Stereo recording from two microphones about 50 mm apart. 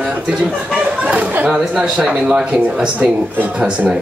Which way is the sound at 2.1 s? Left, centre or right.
Centre.